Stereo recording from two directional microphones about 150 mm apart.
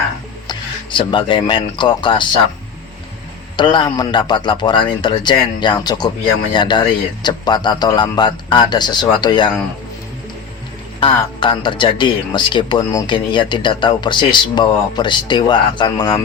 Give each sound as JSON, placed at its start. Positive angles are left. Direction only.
{"t": 0.4, "sound": "speech", "side_deg": 30}
{"t": 3.6, "sound": "a man's voice", "side_deg": 30}
{"t": 11.0, "sound": "speech", "side_deg": 35}